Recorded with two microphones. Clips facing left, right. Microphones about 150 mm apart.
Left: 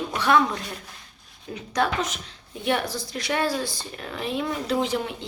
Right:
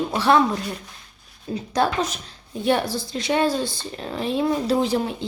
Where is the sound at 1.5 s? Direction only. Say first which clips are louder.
Right 3 dB; 35° right (ahead or behind).